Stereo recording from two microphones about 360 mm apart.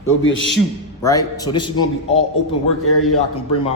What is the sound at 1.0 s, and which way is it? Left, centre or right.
Speech, centre.